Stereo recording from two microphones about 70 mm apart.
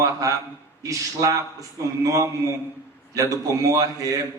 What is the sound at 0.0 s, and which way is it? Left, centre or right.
A man's voice, right.